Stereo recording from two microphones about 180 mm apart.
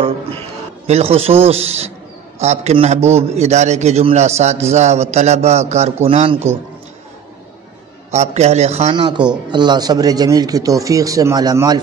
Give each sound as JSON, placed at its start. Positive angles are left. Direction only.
{"t": 0.8, "sound": "a man's voice", "side_deg": -35}
{"t": 8.1, "sound": "a man's voice", "side_deg": -40}
{"t": 9.0, "sound": "a man's voice", "side_deg": -25}